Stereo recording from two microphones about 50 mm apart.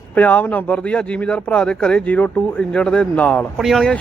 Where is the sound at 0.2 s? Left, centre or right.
Left.